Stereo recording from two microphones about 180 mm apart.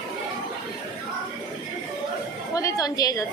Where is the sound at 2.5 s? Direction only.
20° left (ahead or behind).